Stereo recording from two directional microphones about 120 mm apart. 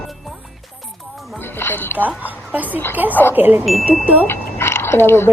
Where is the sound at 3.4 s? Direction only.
15° right (ahead or behind).